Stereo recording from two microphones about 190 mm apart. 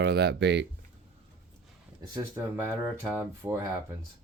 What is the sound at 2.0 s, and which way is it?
Speech, 20° right (ahead or behind).